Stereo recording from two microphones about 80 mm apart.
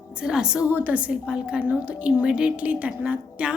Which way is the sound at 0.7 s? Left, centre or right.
Centre.